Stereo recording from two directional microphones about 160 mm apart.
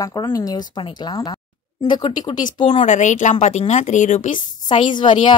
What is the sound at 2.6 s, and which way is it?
Speech, 50° left (ahead or behind).